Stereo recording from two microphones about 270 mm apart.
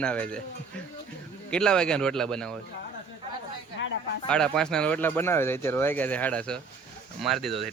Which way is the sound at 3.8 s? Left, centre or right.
Left.